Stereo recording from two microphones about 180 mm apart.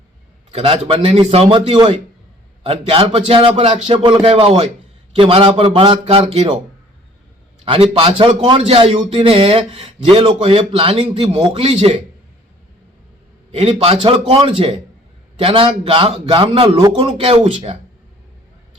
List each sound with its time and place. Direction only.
0.5 s a man's voice: 30° right (ahead or behind)
7.6 s a man's voice: 30° right (ahead or behind)
13.5 s a man's voice: 35° right (ahead or behind)